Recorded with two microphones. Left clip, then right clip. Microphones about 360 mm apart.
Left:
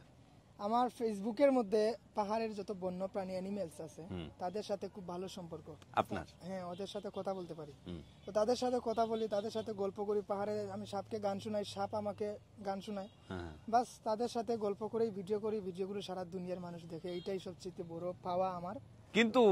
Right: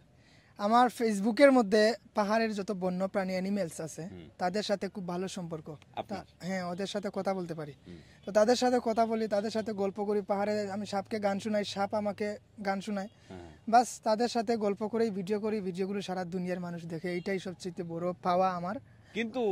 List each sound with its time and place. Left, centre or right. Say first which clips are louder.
0.6 s speech: right 9 dB; right
19.1 s speech: left 4 dB; centre